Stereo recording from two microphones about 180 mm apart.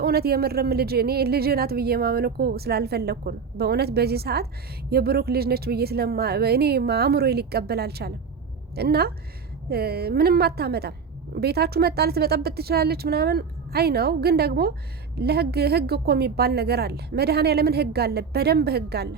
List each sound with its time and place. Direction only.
0.0 s a woman's voice: 60° right (ahead or behind)